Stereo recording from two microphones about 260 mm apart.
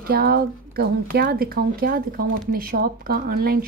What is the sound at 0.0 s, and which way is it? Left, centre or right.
A woman's voice, right.